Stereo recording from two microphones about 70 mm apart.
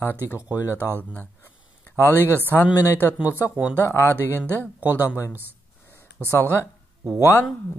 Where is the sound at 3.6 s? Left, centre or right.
Left.